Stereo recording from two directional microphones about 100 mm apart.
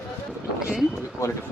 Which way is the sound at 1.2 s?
30° left (ahead or behind).